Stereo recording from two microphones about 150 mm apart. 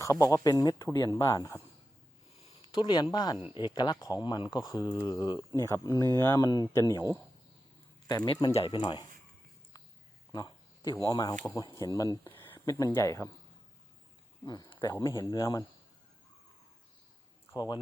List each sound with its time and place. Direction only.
0.0 s speech: 20° left (ahead or behind)
3.3 s speech: 10° right (ahead or behind)
3.6 s speech: 30° left (ahead or behind)
8.0 s speech: 25° left (ahead or behind)
10.3 s speech: 25° left (ahead or behind)
14.4 s speech: 25° left (ahead or behind)